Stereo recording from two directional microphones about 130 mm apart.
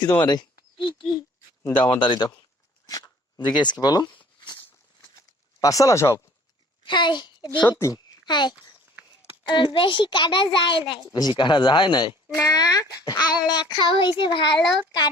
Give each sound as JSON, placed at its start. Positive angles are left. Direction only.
{"t": 0.3, "sound": "speech", "side_deg": 35}
{"t": 1.6, "sound": "speech", "side_deg": 15}
{"t": 1.9, "sound": "speech", "side_deg": 35}
{"t": 5.5, "sound": "speech", "side_deg": 25}
{"t": 6.8, "sound": "a child's voice", "side_deg": 35}
{"t": 7.7, "sound": "speech", "side_deg": 25}
{"t": 8.2, "sound": "a child's voice", "side_deg": 35}